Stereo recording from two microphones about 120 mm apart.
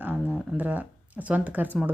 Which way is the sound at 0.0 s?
15° right (ahead or behind).